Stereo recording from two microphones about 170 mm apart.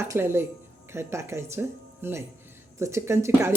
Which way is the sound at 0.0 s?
15° right (ahead or behind).